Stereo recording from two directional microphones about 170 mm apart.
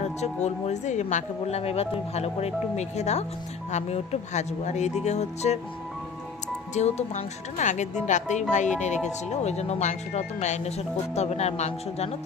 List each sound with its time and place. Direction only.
0.0 s speech: 40° left (ahead or behind)
6.7 s speech: 40° left (ahead or behind)